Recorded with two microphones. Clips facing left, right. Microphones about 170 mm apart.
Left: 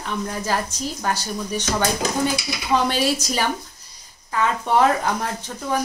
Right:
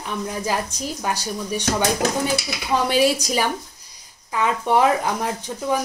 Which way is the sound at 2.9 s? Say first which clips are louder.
Right 3 dB; 15° right (ahead or behind).